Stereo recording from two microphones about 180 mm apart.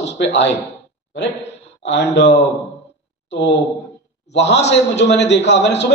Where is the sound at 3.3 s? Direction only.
70° left (ahead or behind).